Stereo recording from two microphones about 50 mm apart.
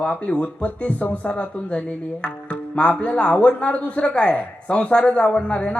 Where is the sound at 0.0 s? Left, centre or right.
Left.